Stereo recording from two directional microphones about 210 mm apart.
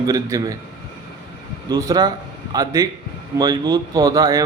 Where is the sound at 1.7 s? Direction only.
15° right (ahead or behind).